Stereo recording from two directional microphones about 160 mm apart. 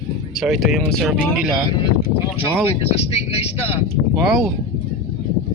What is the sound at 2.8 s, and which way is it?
Speech, 40° left (ahead or behind).